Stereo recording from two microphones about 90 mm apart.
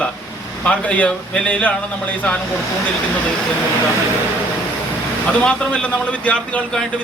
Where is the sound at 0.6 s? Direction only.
15° left (ahead or behind).